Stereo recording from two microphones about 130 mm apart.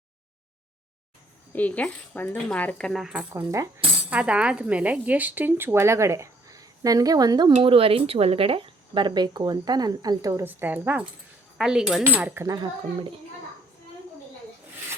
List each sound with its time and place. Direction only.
1.5 s speech: 10° left (ahead or behind); by 3.2 s 5° right (ahead or behind)
3.3 s speech: 25° right (ahead or behind)
4.1 s a woman's voice: 10° right (ahead or behind); by 7.5 s 30° right (ahead or behind)
7.6 s speech: 45° right (ahead or behind); by 10.4 s 25° right (ahead or behind)
10.4 s a woman's voice: 15° right (ahead or behind)
12.5 s speech: 40° right (ahead or behind)